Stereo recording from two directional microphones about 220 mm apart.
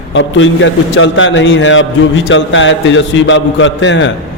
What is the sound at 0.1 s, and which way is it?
A man's voice, 60° left (ahead or behind).